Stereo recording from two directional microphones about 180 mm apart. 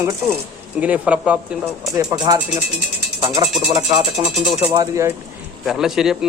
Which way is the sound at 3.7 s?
20° right (ahead or behind).